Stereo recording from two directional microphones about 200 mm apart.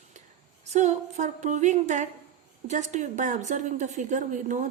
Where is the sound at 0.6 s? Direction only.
35° right (ahead or behind).